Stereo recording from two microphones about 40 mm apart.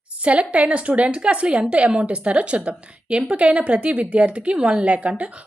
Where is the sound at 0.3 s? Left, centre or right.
Right.